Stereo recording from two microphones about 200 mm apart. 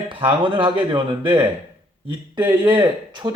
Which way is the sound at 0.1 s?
25° right (ahead or behind).